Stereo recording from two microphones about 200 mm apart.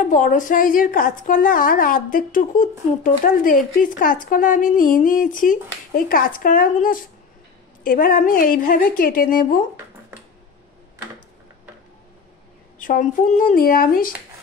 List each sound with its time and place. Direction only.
0.0 s speech: 40° left (ahead or behind)
12.7 s speech: 45° left (ahead or behind)